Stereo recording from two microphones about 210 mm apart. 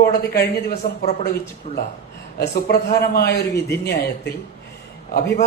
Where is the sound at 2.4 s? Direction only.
50° left (ahead or behind).